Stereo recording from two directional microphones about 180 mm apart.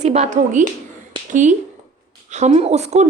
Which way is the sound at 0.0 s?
40° right (ahead or behind).